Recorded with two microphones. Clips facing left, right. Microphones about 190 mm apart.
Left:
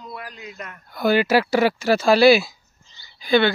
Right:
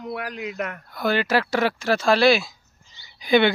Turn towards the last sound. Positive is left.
turn(degrees=-15)  # may be behind; listen again after turning